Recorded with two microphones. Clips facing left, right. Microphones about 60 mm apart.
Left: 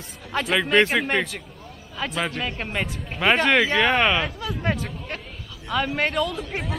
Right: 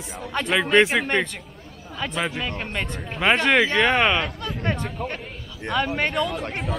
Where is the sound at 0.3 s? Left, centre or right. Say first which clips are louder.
Right 1 dB; centre.